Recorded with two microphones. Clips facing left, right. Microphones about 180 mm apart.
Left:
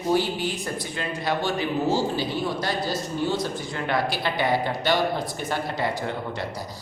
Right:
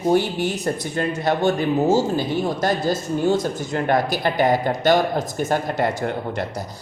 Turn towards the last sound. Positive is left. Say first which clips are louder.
# right 5 dB
turn(degrees=-50)  # may be behind; listen again after turning